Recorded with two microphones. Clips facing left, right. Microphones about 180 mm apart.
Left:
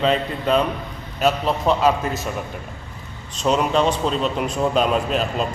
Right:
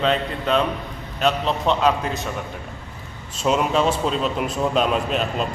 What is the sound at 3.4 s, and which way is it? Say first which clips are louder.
Speech: left 1 dB; 5° right (ahead or behind).